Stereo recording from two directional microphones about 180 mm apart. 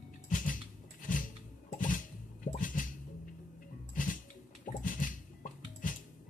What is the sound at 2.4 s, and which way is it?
Bathtub, 50° left (ahead or behind).